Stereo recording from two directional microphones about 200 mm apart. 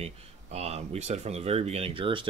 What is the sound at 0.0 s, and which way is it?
Speech, 30° right (ahead or behind).